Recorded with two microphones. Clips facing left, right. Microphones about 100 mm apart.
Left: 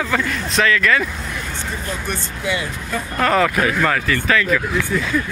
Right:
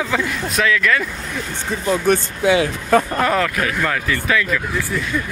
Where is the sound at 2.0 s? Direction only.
80° right.